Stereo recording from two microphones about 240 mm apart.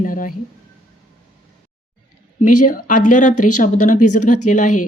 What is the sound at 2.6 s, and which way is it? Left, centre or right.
A woman's voice, left.